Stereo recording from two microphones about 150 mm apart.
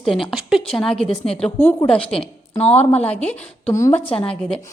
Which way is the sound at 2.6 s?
45° left (ahead or behind).